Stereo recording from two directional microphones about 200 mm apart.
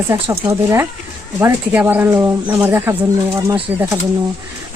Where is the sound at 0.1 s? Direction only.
15° right (ahead or behind).